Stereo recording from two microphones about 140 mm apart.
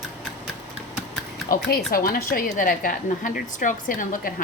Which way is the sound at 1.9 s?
90° left.